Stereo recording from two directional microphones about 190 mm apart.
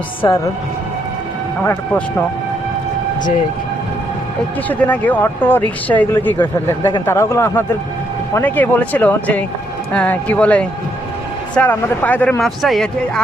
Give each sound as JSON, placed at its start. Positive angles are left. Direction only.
{"t": 0.2, "sound": "speech", "side_deg": 15}
{"t": 1.6, "sound": "speech", "side_deg": 10}
{"t": 4.7, "sound": "speech", "side_deg": 10}